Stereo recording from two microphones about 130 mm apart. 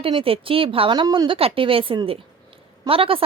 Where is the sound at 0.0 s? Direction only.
45° right (ahead or behind).